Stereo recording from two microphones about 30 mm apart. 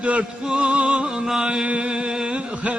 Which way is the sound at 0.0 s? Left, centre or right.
Right.